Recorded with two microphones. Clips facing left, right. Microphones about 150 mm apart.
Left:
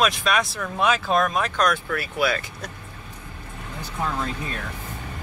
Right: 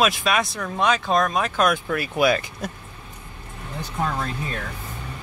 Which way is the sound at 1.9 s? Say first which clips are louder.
Right 4 dB; 20° right (ahead or behind).